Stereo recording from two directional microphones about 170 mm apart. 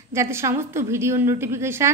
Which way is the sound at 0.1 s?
15° right (ahead or behind).